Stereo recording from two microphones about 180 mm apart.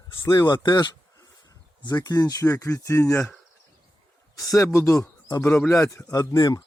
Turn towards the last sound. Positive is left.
turn(degrees=20)  # may be behind; listen again after turning